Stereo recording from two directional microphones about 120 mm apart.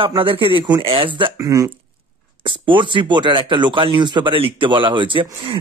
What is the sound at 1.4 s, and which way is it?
Speech, 30° right (ahead or behind).